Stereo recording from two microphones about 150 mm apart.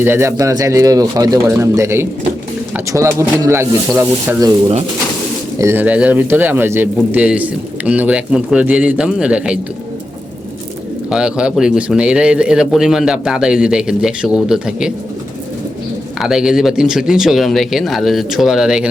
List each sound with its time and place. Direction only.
0.0 s speech: 15° right (ahead or behind)
5.5 s speech: 15° right (ahead or behind)
11.1 s speech: 5° right (ahead or behind)
16.2 s speech: 5° right (ahead or behind)